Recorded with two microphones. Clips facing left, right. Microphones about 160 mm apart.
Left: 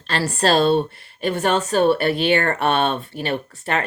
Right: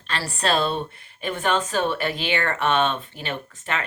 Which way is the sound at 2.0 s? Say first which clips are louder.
Left 7 dB; 50° left (ahead or behind).